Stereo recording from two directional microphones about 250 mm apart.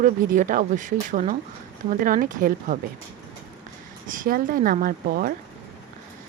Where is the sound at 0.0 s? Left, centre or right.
Right.